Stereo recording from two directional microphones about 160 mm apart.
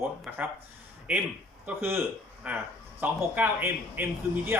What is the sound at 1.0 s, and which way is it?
Speech, 10° right (ahead or behind).